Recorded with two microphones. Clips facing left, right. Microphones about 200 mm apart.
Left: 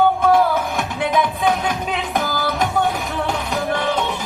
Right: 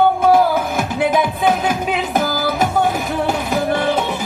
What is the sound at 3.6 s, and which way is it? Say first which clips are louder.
Music: right 3 dB; 5° right (ahead or behind).